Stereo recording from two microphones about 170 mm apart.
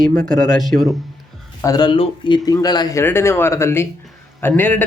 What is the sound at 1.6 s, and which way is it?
A man's voice, 25° left (ahead or behind).